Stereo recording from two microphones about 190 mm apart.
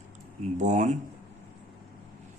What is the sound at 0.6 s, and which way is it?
Speech, 40° right (ahead or behind).